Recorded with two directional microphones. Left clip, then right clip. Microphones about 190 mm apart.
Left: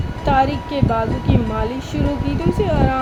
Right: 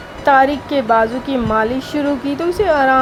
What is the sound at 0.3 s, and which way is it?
Speech, 30° right (ahead or behind).